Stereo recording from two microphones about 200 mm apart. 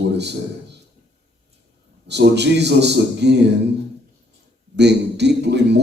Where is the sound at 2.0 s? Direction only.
55° right (ahead or behind).